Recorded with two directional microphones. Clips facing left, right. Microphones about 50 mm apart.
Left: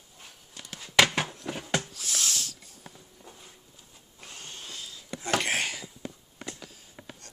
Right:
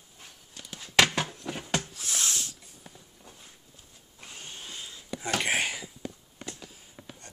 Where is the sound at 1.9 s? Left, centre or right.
Right.